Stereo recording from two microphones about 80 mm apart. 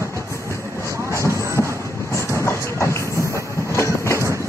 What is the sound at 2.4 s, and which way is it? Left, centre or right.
Train, left.